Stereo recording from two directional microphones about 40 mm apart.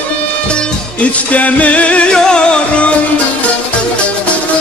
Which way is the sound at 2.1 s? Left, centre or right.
Centre.